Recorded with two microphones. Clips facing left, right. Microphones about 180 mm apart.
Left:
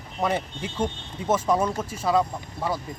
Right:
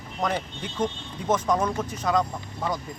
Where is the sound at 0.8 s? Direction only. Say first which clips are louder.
Right 1 dB; 10° left (ahead or behind).